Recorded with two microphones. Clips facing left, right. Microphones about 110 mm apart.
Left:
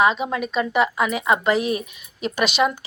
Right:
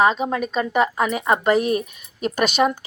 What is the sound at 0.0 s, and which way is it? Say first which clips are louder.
A woman's voice: right 1 dB; 40° right (ahead or behind).